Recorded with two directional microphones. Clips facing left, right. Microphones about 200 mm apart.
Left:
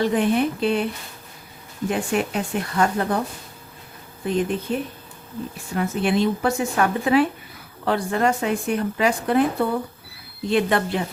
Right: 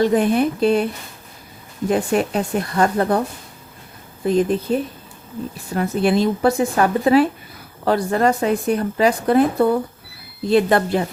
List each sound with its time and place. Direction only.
0.0 s speech: 40° right (ahead or behind)
1.9 s speech: 40° right (ahead or behind)
4.3 s speech: 40° right (ahead or behind)